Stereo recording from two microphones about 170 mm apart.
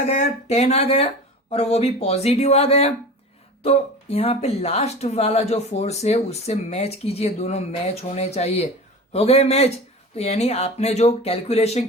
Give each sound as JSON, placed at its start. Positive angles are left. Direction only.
{"t": 0.1, "sound": "speech", "side_deg": 40}